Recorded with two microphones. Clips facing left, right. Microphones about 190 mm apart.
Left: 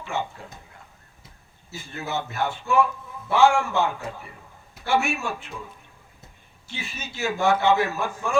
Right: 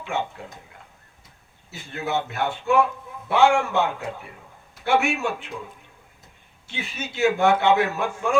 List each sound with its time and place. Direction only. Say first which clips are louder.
1.7 s a man's voice: right 3 dB; 60° right (ahead or behind)
4.9 s a man's voice: right 2 dB; 60° right (ahead or behind)
6.7 s a man's voice: right 4 dB; 60° right (ahead or behind)